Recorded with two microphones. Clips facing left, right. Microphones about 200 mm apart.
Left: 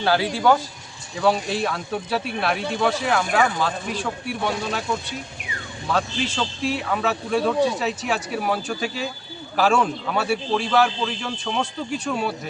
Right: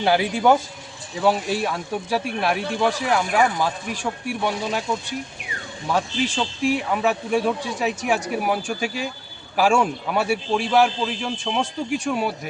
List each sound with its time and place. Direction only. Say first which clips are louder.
0.0 s speech: right 1 dB; 20° right (ahead or behind)
5.9 s speech: right 1 dB; 15° right (ahead or behind)